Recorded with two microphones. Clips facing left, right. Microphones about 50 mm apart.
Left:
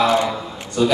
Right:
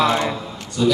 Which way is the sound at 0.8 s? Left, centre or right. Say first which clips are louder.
Even; left.